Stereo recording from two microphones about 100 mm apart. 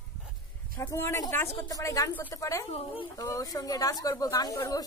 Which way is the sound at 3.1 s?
35° left (ahead or behind).